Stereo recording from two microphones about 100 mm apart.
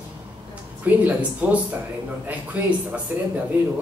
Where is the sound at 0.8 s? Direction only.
15° right (ahead or behind).